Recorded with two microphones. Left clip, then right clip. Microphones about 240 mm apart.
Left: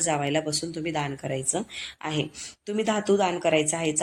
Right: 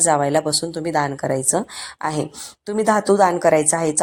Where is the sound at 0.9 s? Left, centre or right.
Centre.